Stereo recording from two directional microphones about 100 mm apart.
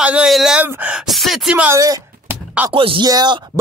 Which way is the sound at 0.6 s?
15° right (ahead or behind).